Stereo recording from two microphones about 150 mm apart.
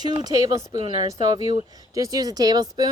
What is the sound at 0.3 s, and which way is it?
Speech, 25° right (ahead or behind).